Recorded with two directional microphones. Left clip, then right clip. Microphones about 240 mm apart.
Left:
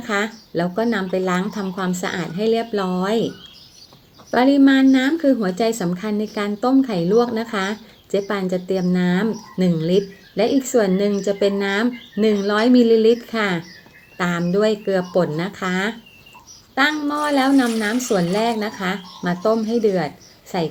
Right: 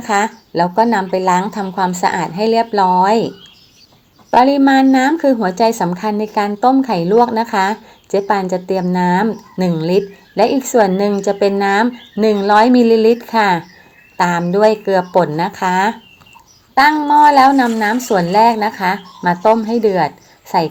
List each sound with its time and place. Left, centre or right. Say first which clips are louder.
0.6 s speech: right 9 dB; centre
2.1 s a woman's voice: right 8 dB; right
2.4 s speech: right 7 dB; centre
4.4 s speech: right 5 dB; centre
17.3 s speech: right 8 dB; centre